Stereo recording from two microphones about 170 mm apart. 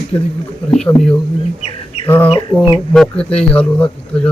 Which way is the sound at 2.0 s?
10° left (ahead or behind).